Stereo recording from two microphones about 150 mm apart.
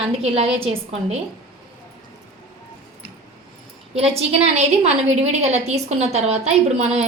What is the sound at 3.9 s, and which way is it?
A woman's voice, 45° right (ahead or behind).